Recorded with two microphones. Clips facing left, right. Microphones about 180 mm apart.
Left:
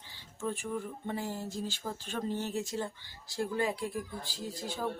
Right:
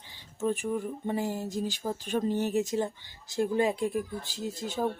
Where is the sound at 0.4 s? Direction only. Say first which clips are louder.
Right 6 dB; 15° right (ahead or behind).